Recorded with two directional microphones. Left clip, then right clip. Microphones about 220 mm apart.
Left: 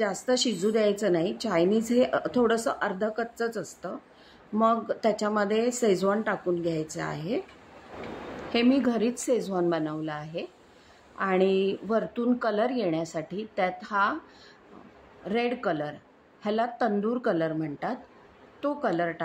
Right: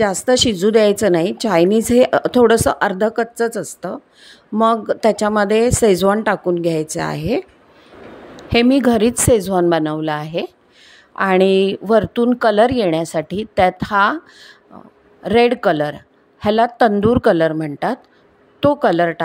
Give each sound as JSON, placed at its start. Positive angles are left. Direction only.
{"t": 0.0, "sound": "a woman's voice", "side_deg": -40}